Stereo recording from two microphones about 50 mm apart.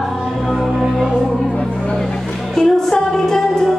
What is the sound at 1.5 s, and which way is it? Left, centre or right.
Music, centre.